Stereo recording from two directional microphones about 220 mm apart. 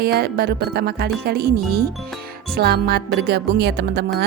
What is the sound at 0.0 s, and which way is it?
A woman's voice, 45° right (ahead or behind).